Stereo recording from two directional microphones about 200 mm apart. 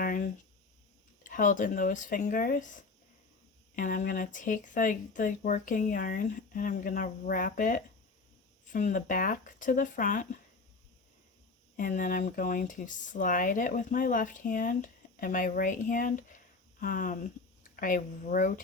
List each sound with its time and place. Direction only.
0.0 s a sound: 45° left (ahead or behind)
1.2 s speech: 40° left (ahead or behind)
11.8 s speech: 40° left (ahead or behind)